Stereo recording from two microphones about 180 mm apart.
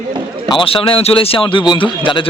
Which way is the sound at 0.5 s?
30° left (ahead or behind).